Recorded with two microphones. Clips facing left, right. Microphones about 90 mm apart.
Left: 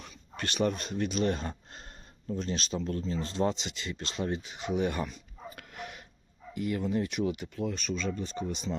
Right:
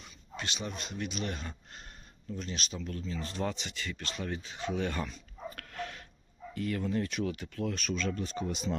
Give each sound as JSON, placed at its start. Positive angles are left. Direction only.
{"t": 0.0, "sound": "speech", "side_deg": 50}
{"t": 5.5, "sound": "dog", "side_deg": 15}
{"t": 6.5, "sound": "speech", "side_deg": 15}